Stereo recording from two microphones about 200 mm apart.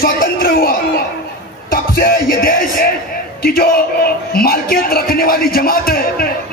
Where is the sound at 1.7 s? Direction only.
45° left (ahead or behind).